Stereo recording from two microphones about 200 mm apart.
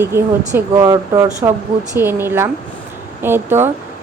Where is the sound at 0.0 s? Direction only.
10° right (ahead or behind).